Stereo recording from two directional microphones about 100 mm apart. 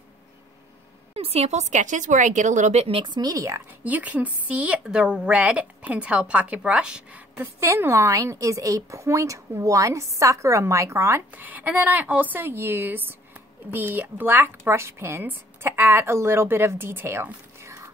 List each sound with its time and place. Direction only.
1.1 s speech: 90° right
2.7 s speech: 80° right
3.1 s speech: 40° right (ahead or behind)
3.8 s a woman's voice: 15° right (ahead or behind)